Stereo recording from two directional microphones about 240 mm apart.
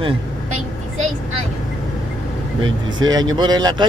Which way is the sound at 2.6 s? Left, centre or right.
Centre.